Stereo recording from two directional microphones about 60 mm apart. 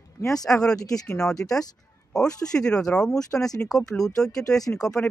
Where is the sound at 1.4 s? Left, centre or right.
Left.